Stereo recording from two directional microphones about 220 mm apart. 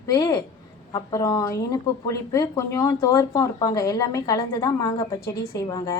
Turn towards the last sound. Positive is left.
turn(degrees=15)  # may be behind; listen again after turning